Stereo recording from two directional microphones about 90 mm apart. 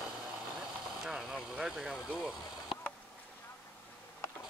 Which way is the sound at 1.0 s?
5° right (ahead or behind).